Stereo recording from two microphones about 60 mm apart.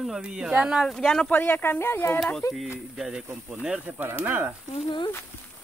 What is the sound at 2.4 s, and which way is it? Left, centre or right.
Speech, left.